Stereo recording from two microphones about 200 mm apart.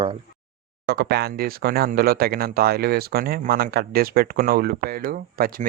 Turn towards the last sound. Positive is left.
turn(degrees=-45)  # may be behind; listen again after turning